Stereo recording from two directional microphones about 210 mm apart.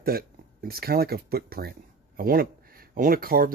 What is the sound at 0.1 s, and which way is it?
Speech, 45° right (ahead or behind).